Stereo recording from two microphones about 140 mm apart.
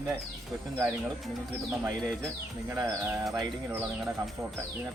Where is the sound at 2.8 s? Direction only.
25° right (ahead or behind).